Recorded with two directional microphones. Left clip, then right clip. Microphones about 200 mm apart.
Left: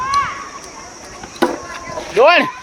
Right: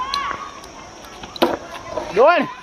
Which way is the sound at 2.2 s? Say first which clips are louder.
Left 3 dB; 15° left (ahead or behind).